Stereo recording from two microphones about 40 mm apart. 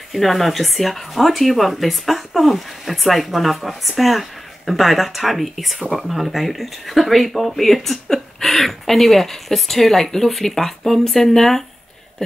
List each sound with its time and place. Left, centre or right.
0.1 s speech: centre